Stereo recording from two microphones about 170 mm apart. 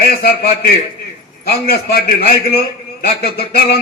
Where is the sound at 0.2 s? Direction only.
65° left (ahead or behind).